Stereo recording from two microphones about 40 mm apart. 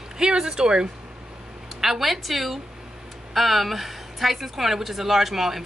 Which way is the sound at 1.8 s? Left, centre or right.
Centre.